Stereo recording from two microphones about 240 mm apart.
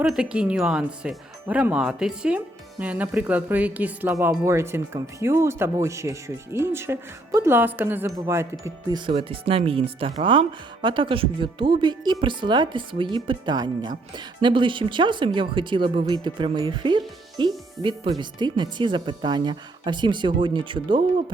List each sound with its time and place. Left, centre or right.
0.0 s speech: centre